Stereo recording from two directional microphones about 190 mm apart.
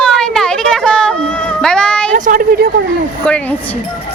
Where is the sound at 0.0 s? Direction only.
5° left (ahead or behind).